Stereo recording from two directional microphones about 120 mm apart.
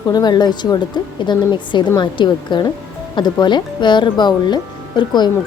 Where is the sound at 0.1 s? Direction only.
35° left (ahead or behind).